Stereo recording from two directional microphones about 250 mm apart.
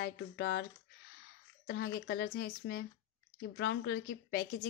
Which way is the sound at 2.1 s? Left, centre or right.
Left.